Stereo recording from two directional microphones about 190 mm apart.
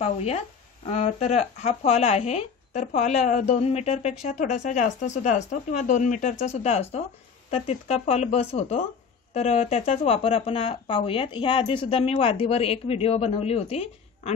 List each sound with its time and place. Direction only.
0.0 s speech: 35° left (ahead or behind)